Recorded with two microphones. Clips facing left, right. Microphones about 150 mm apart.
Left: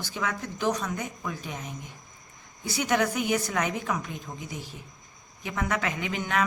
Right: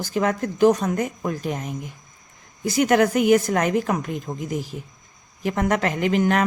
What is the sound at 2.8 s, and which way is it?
A woman's voice, 55° right (ahead or behind).